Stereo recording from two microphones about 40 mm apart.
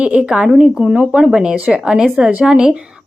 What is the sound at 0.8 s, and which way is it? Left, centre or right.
A woman's voice, right.